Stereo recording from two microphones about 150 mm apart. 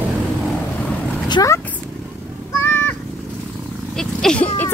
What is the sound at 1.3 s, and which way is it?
Speech, 20° left (ahead or behind).